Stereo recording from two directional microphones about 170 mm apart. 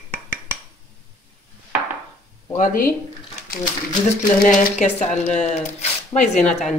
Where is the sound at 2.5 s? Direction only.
55° left (ahead or behind).